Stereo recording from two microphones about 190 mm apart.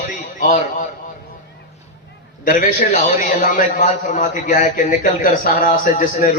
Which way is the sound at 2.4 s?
45° left (ahead or behind).